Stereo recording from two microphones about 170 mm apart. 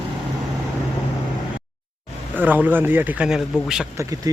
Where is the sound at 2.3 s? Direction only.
10° right (ahead or behind).